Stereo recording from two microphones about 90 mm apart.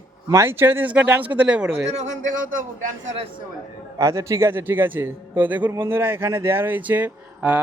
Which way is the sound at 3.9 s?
35° right (ahead or behind).